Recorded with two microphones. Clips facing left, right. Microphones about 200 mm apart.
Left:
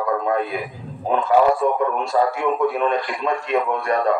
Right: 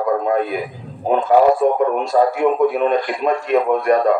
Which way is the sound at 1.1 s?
50° right (ahead or behind).